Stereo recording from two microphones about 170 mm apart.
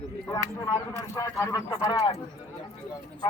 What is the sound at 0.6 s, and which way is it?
Speech, 20° left (ahead or behind).